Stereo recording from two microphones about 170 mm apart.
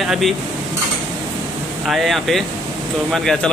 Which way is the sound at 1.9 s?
Centre (ahead or behind).